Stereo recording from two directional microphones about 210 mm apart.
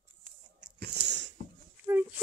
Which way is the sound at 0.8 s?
55° right (ahead or behind).